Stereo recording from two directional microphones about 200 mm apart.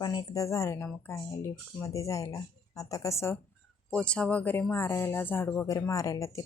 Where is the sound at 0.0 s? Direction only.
20° left (ahead or behind).